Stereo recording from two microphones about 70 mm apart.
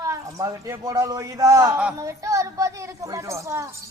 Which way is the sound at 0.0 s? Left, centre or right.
Right.